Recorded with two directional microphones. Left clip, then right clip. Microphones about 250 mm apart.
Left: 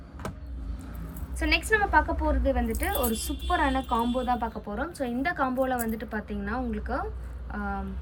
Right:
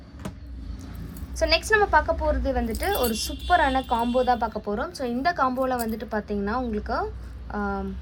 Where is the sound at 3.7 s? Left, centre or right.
Right.